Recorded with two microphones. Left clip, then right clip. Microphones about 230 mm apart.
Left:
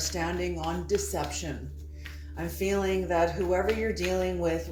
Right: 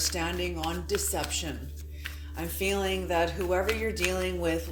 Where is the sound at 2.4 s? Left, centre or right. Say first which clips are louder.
Left 1 dB; right.